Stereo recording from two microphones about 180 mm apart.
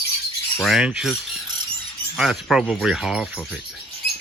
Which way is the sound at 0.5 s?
Centre (ahead or behind).